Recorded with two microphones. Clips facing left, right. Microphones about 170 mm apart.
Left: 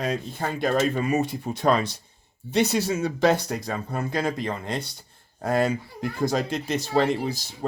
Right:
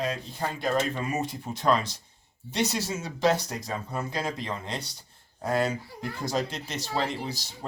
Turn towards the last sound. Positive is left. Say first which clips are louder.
# left 7 dB
turn(degrees=55)  # may be behind; listen again after turning